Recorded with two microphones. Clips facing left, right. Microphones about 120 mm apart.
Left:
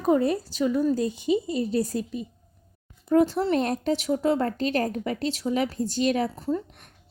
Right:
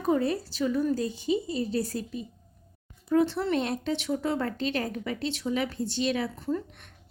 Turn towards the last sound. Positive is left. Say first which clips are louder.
# left 3 dB
turn(degrees=35)  # may be behind; listen again after turning